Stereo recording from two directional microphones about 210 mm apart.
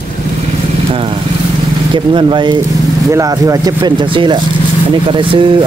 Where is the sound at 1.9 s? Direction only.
25° right (ahead or behind).